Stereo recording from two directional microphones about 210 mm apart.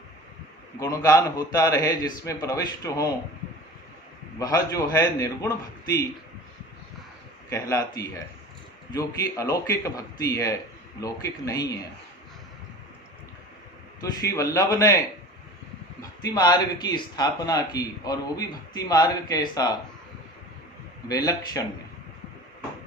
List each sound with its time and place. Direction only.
0.8 s speech: 15° left (ahead or behind)
4.4 s speech: 15° left (ahead or behind)
7.5 s speech: 15° left (ahead or behind)
14.0 s speech: 15° left (ahead or behind)
16.0 s speech: 20° left (ahead or behind)
21.1 s speech: 15° left (ahead or behind)